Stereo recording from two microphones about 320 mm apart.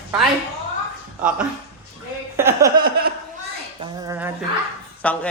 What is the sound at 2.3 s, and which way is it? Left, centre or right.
Speech, centre.